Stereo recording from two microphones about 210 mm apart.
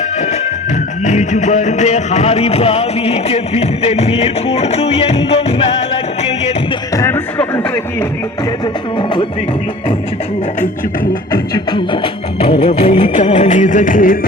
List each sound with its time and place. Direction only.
1.0 s music: 35° left (ahead or behind)
6.9 s a sound: 10° left (ahead or behind)
8.6 s music: 20° left (ahead or behind)
11.5 s music: 20° left (ahead or behind); by 14.2 s 40° left (ahead or behind)